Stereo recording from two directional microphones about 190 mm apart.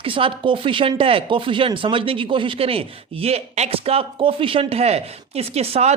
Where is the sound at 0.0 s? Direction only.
30° right (ahead or behind).